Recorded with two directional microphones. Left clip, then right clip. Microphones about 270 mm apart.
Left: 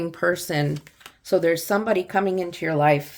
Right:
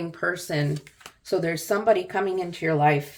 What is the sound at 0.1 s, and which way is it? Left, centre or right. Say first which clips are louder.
Speech: left 3 dB; left.